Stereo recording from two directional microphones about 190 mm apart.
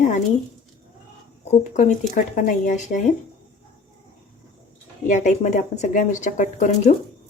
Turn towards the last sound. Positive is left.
turn(degrees=40)  # may be behind; listen again after turning